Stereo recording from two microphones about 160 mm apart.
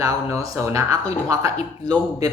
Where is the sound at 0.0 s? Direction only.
20° right (ahead or behind).